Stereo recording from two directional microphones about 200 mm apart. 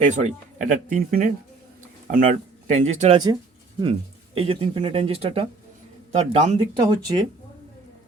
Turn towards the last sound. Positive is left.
turn(degrees=-20)  # may be behind; listen again after turning